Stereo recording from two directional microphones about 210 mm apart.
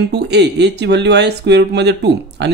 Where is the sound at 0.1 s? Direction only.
55° right (ahead or behind).